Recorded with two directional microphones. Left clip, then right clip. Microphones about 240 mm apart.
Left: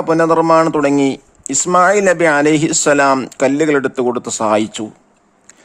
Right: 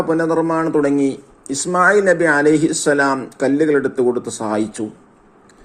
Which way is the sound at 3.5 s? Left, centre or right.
Left.